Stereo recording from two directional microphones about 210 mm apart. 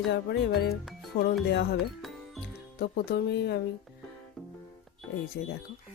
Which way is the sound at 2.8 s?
50° left (ahead or behind).